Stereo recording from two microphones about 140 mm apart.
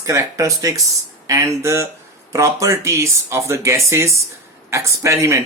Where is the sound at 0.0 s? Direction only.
20° right (ahead or behind).